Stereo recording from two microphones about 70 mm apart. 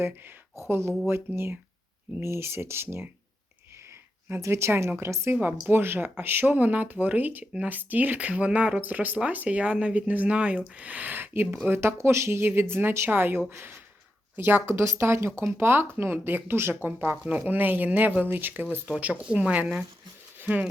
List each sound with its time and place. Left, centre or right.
0.7 s speech: right
4.4 s speech: right
5.4 s speech: right